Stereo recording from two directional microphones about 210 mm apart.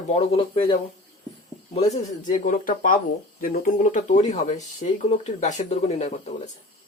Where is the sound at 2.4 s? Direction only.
40° left (ahead or behind).